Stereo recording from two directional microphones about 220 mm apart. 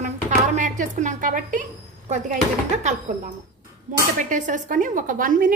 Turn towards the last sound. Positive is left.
turn(degrees=-40)  # may be behind; listen again after turning